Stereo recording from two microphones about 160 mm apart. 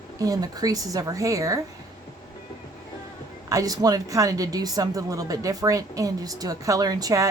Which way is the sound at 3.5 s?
20° right (ahead or behind).